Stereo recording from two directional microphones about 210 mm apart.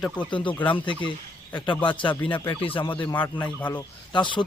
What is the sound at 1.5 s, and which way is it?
A man's voice, 20° left (ahead or behind).